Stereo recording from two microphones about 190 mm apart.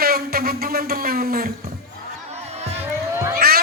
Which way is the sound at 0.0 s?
50° right (ahead or behind).